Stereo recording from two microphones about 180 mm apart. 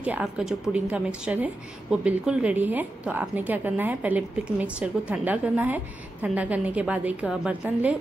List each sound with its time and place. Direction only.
0.0 s a woman's voice: 5° right (ahead or behind)